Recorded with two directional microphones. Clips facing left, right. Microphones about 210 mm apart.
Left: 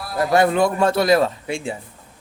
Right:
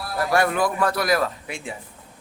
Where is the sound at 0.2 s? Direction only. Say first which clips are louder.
Left 5 dB; 20° left (ahead or behind).